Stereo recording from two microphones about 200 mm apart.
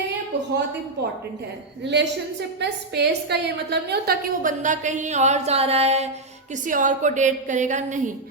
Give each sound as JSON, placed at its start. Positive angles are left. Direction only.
{"t": 1.8, "sound": "a woman's voice", "side_deg": -60}